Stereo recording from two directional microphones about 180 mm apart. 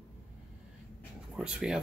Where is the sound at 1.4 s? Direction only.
5° right (ahead or behind).